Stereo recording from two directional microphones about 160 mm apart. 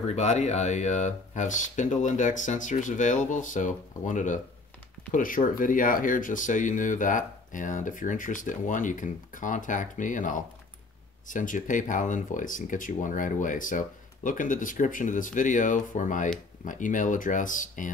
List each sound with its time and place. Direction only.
0.1 s speech: 45° left (ahead or behind)